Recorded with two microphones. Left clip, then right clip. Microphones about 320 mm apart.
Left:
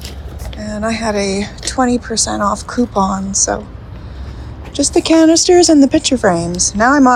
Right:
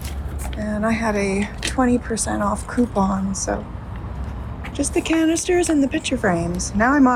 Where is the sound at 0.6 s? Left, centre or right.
Centre.